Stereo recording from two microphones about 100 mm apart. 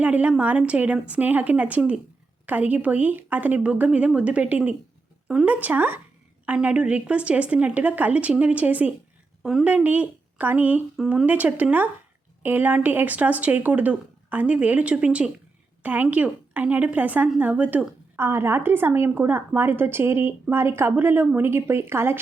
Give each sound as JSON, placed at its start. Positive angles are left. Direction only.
{"t": 0.0, "sound": "speech", "side_deg": -15}
{"t": 9.4, "sound": "a woman's voice", "side_deg": -5}
{"t": 9.6, "sound": "speech", "side_deg": -15}
{"t": 10.9, "sound": "speech", "side_deg": -5}
{"t": 11.3, "sound": "a woman's voice", "side_deg": -15}